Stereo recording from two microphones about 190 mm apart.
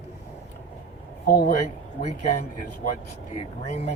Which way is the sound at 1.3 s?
55° left (ahead or behind).